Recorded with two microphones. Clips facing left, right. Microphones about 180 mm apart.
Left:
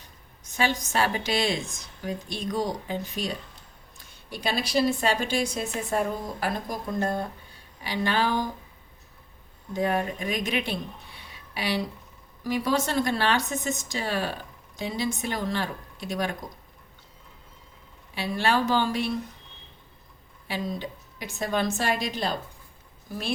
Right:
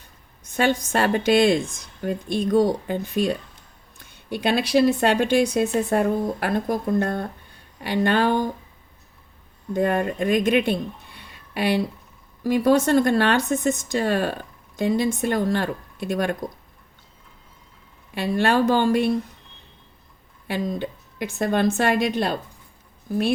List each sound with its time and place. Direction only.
0.5 s speech: 50° right (ahead or behind)
9.7 s speech: 55° right (ahead or behind)
18.1 s speech: 55° right (ahead or behind)
20.5 s speech: 55° right (ahead or behind)